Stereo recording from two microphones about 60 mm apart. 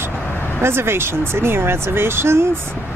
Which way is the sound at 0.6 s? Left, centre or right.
Right.